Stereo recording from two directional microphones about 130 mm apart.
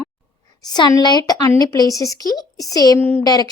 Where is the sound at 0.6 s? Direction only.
30° left (ahead or behind).